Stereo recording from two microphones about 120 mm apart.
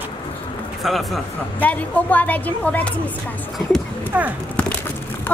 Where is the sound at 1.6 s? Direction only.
15° left (ahead or behind).